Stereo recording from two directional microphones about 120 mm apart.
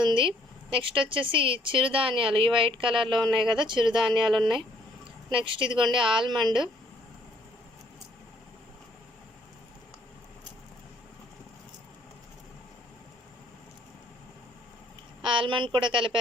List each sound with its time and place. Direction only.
0.0 s a sound: 45° right (ahead or behind)
1.1 s a woman's voice: 45° right (ahead or behind)
15.2 s a woman's voice: 45° right (ahead or behind)